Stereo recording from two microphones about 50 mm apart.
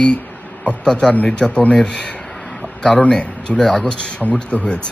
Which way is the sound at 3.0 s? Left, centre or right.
Left.